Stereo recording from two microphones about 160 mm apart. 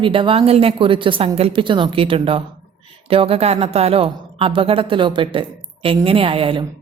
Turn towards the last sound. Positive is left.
turn(degrees=-35)  # may be behind; listen again after turning